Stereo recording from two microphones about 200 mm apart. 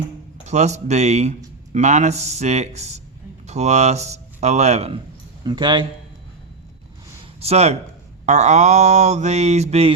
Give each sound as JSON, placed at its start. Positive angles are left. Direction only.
{"t": 0.4, "sound": "mantra", "side_deg": -35}
{"t": 3.4, "sound": "speech", "side_deg": -35}
{"t": 7.3, "sound": "speech", "side_deg": -30}
{"t": 8.3, "sound": "mantra", "side_deg": -35}